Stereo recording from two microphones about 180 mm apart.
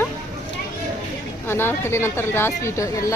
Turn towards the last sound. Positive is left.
turn(degrees=15)  # may be behind; listen again after turning